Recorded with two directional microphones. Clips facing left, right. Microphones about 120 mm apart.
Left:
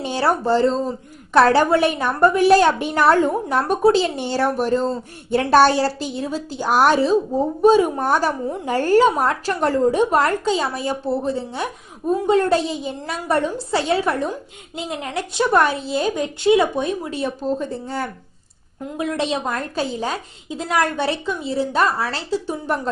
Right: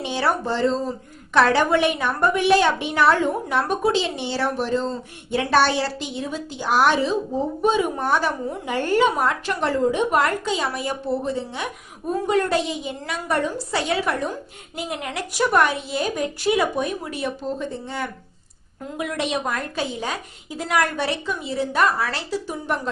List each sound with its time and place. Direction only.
0.0 s a woman's voice: 40° left (ahead or behind)